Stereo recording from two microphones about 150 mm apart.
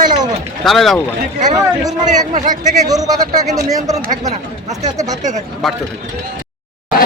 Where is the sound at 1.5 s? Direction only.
25° right (ahead or behind).